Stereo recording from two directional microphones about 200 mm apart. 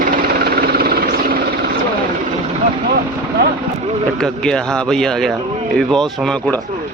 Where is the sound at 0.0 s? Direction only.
50° right (ahead or behind).